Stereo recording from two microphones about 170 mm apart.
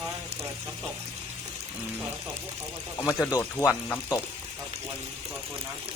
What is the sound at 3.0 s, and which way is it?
Speech, 15° left (ahead or behind).